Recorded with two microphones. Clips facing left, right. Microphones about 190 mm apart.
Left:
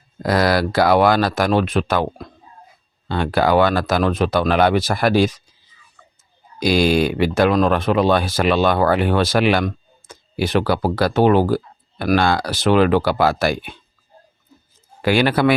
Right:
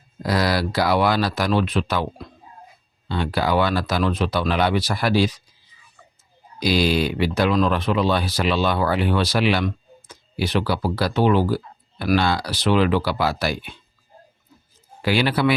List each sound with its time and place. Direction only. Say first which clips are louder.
0.2 s speech: left 4 dB; 50° left (ahead or behind)
6.6 s speech: left 4 dB; 50° left (ahead or behind)
15.0 s speech: left 4 dB; 50° left (ahead or behind)